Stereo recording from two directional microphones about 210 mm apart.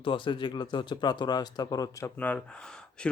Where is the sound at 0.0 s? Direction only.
25° left (ahead or behind).